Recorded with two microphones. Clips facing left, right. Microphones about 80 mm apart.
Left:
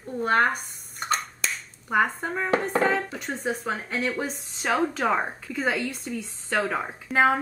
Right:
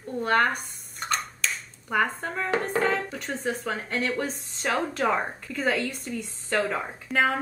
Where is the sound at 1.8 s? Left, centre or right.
Centre.